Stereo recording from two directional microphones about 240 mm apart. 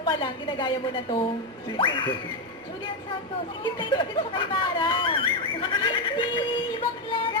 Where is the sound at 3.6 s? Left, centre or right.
Centre.